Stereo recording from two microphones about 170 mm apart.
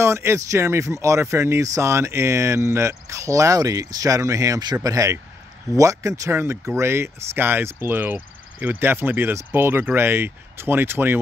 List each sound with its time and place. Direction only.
0.0 s speech: 15° right (ahead or behind)